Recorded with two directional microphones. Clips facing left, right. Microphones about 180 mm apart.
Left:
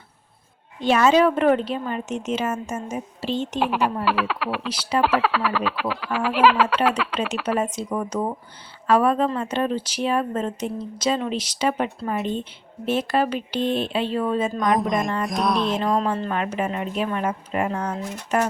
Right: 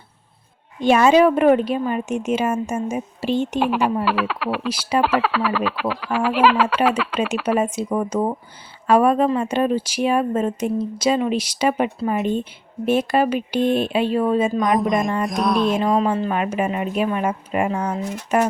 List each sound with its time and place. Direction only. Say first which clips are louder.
0.8 s speech: right 3 dB; 15° right (ahead or behind)
3.6 s speech: right 3 dB; centre (ahead or behind)